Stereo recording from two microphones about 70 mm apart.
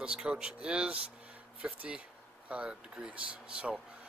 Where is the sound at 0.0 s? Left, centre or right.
Centre.